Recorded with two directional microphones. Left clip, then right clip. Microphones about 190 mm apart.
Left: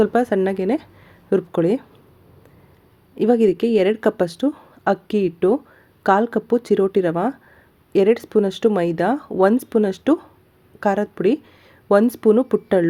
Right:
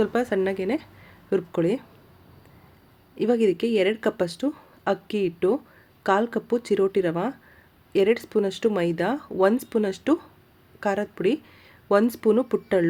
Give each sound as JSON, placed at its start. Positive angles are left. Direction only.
{"t": 0.0, "sound": "speech", "side_deg": 15}
{"t": 3.2, "sound": "a woman's voice", "side_deg": 15}